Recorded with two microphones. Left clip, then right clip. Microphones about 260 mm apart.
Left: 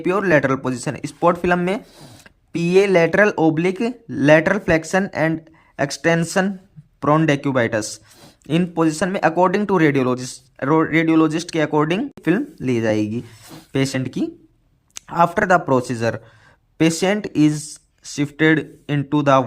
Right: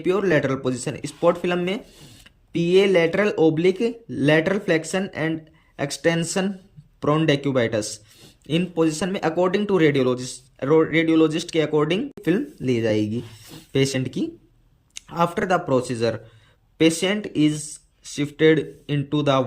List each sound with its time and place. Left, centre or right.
0.0 s speech: centre